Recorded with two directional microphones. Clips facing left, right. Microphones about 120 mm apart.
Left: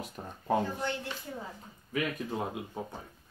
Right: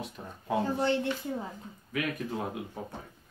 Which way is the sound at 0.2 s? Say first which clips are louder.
Left 1 dB; 30° left (ahead or behind).